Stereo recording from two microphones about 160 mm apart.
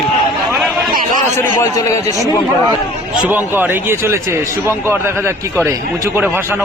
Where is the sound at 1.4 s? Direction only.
20° left (ahead or behind).